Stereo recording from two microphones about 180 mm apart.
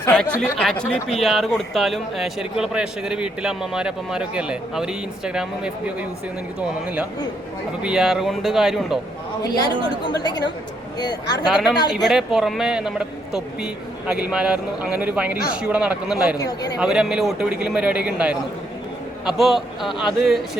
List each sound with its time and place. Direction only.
0.0 s speech: 5° left (ahead or behind)
9.4 s a woman's voice: 20° left (ahead or behind)
12.0 s a man's voice: centre (ahead or behind)
16.4 s a woman's voice: 20° left (ahead or behind)
16.8 s speech: 5° right (ahead or behind)
19.4 s speech: centre (ahead or behind)